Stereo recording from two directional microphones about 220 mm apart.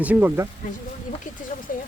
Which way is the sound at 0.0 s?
5° right (ahead or behind).